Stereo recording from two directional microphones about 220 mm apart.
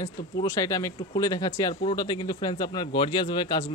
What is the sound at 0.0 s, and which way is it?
Speech, 15° left (ahead or behind).